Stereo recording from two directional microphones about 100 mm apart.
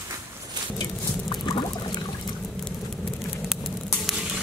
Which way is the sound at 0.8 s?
45° left (ahead or behind).